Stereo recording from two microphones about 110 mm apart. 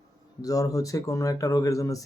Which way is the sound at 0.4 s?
30° left (ahead or behind).